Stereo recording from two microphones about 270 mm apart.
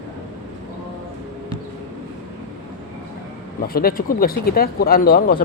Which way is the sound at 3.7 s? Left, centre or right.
Left.